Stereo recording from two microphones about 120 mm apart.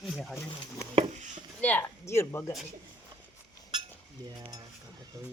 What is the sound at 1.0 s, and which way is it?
Chopping, 90° right.